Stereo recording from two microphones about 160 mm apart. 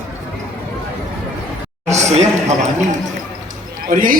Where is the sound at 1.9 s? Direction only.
45° right (ahead or behind).